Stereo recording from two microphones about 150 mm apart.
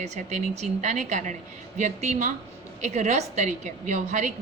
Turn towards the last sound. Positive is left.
turn(degrees=-55)  # may be behind; listen again after turning